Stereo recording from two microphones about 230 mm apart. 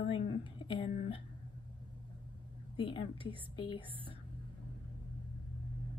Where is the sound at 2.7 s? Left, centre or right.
Left.